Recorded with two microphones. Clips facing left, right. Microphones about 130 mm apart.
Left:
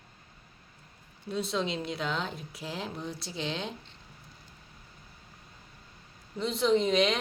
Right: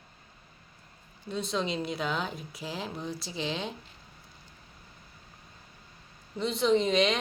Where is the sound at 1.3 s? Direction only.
5° left (ahead or behind).